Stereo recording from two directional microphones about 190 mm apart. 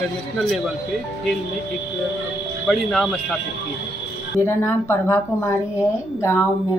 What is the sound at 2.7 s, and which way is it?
Speech, centre (ahead or behind).